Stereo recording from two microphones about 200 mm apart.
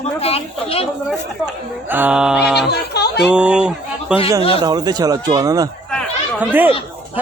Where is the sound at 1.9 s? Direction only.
10° right (ahead or behind).